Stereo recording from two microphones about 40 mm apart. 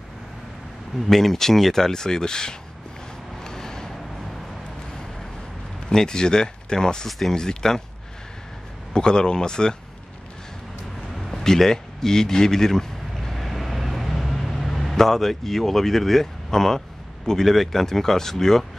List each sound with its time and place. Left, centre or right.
0.9 s speech: centre
3.4 s a sound: centre
5.9 s speech: centre
7.1 s speech: centre
7.3 s speech: centre
8.9 s speech: centre
11.2 s a sound: centre
17.3 s speech: centre